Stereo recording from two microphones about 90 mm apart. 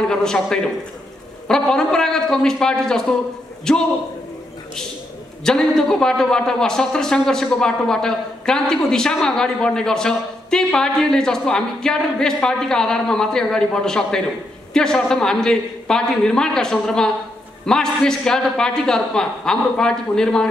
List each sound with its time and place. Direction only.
0.0 s a man's voice: 5° left (ahead or behind)
5.4 s a man's voice: 5° left (ahead or behind)